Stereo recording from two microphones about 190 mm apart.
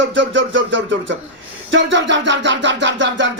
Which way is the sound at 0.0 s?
75° right (ahead or behind).